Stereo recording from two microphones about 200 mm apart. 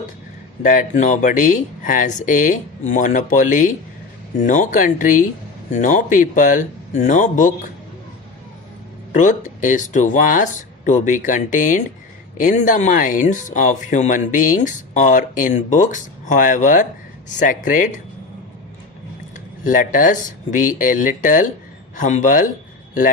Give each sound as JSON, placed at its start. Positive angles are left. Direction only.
{"t": 0.6, "sound": "speech", "side_deg": 40}
{"t": 9.1, "sound": "speech", "side_deg": 40}
{"t": 19.6, "sound": "speech", "side_deg": 40}